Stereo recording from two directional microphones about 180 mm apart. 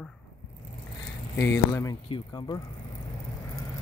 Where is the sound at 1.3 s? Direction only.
15° left (ahead or behind).